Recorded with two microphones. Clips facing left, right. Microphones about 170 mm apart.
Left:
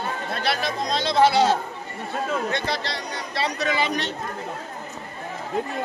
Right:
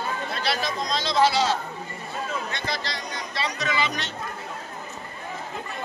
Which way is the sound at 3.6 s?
55° left (ahead or behind).